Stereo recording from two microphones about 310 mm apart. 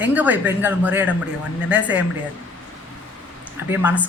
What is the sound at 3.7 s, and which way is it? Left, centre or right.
Speech, centre.